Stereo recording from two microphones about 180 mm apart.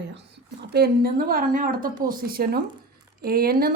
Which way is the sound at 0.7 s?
60° right (ahead or behind).